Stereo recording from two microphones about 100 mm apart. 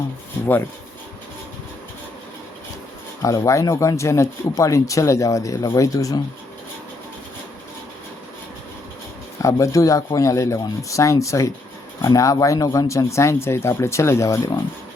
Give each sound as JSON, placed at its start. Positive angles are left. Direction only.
{"t": 3.2, "sound": "speech", "side_deg": 35}
{"t": 9.4, "sound": "speech", "side_deg": 35}